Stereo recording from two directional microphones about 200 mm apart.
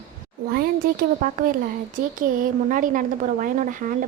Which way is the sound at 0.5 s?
45° right (ahead or behind).